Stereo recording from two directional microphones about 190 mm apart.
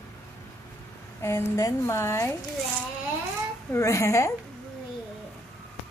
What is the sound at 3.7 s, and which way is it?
Speech, 15° left (ahead or behind).